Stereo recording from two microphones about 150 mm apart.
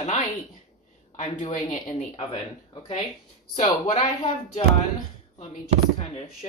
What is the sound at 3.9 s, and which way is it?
Speech, 50° left (ahead or behind).